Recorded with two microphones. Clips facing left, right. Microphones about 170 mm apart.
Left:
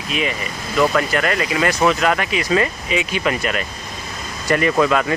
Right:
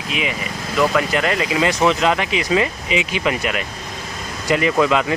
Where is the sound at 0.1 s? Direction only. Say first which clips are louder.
Left 1 dB; 15° right (ahead or behind).